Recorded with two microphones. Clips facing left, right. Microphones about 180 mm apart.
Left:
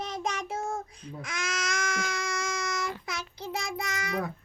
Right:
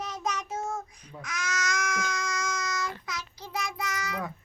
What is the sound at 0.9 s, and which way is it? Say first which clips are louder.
Baby cry: left 2 dB; 30° left (ahead or behind).